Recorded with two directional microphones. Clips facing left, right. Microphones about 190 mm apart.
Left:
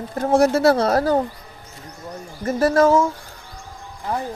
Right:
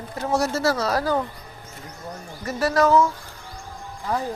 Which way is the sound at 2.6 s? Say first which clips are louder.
Left 4 dB; 50° left (ahead or behind).